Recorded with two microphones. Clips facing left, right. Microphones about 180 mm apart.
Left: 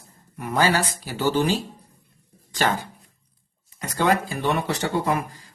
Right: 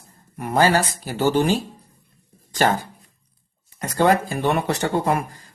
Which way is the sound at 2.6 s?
45° right (ahead or behind).